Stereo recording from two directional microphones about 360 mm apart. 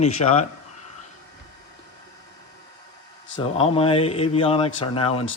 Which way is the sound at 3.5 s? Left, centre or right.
Centre.